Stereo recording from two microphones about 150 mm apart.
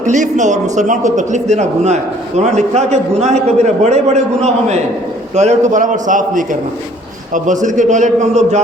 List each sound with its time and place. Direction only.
0.0 s a man's voice: 55° right (ahead or behind)